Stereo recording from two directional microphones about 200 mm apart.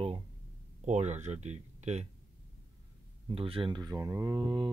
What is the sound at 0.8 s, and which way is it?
Speech, 35° right (ahead or behind).